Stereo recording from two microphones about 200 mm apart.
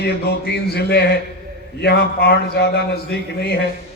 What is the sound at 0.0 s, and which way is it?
A man's voice, 50° left (ahead or behind).